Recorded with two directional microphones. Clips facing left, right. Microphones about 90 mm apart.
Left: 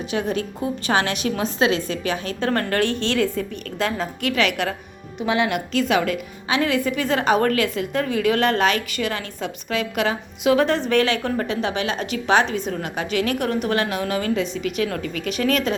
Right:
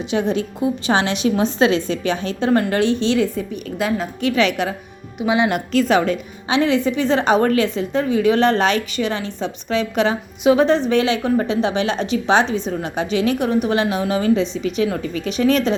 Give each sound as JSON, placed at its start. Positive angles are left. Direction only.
{"t": 0.0, "sound": "a woman's voice", "side_deg": -25}
{"t": 2.5, "sound": "a woman's voice", "side_deg": -15}
{"t": 4.2, "sound": "a woman's voice", "side_deg": -25}
{"t": 5.5, "sound": "a woman's voice", "side_deg": -40}